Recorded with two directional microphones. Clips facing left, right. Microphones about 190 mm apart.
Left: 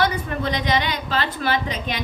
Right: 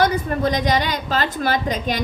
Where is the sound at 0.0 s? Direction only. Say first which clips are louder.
Right 4 dB; 40° right (ahead or behind).